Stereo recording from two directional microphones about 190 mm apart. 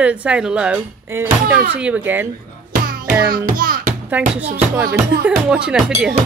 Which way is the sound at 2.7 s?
50° right (ahead or behind).